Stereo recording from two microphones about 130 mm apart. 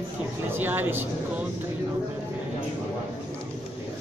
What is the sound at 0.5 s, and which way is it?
Speech, 15° right (ahead or behind).